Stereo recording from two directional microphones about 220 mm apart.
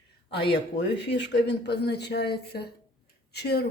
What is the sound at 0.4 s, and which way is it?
Speech, 50° left (ahead or behind).